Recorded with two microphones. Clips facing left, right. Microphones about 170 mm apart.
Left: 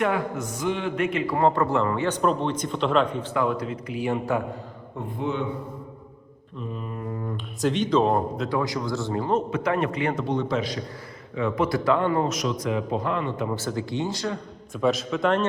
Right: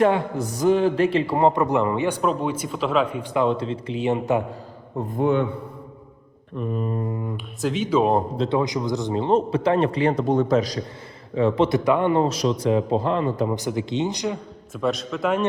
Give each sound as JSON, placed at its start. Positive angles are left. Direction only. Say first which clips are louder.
{"t": 0.0, "sound": "a man's voice", "louder": "right 5 dB", "side_deg": -35}
{"t": 1.4, "sound": "a man's voice", "louder": "right 2 dB", "side_deg": -20}
{"t": 3.3, "sound": "a man's voice", "louder": "right 5 dB", "side_deg": -25}
{"t": 4.9, "sound": "a man's voice", "louder": "right 7 dB", "side_deg": -45}
{"t": 6.6, "sound": "a man's voice", "louder": "right 8 dB", "side_deg": -45}
{"t": 7.6, "sound": "a man's voice", "louder": "right 1 dB", "side_deg": -5}
{"t": 8.1, "sound": "a man's voice", "louder": "right 3 dB", "side_deg": -25}
{"t": 10.2, "sound": "a man's voice", "louder": "right 6 dB", "side_deg": -45}
{"t": 11.3, "sound": "a man's voice", "louder": "right 5 dB", "side_deg": -30}
{"t": 12.2, "sound": "a man's voice", "louder": "right 5 dB", "side_deg": -30}
{"t": 13.5, "sound": "a man's voice", "louder": "right 3 dB", "side_deg": -15}
{"t": 14.7, "sound": "a man's voice", "louder": "left 1 dB", "side_deg": 0}